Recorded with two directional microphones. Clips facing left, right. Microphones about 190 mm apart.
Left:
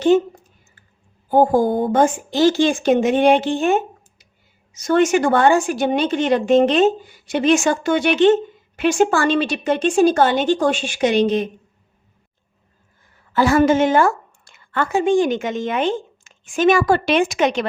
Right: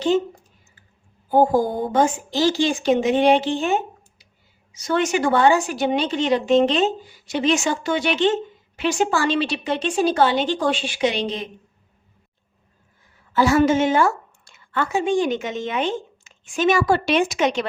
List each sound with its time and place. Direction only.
1.5 s speech: 55° left (ahead or behind)
13.3 s speech: 55° left (ahead or behind)